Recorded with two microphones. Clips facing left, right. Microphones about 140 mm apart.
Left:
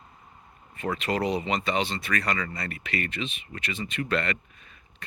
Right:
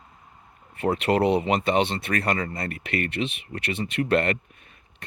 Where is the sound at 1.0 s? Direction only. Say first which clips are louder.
Right 6 dB; 60° right (ahead or behind).